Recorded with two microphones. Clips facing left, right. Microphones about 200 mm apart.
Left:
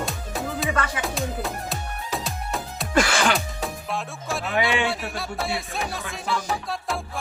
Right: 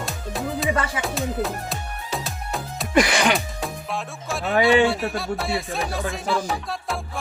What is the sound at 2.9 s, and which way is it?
Music, 15° right (ahead or behind).